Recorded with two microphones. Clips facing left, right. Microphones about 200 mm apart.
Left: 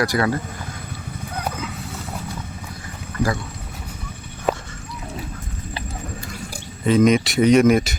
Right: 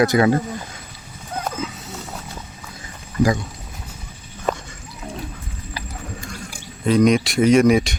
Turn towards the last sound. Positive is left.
turn(degrees=0)  # may be behind; listen again after turning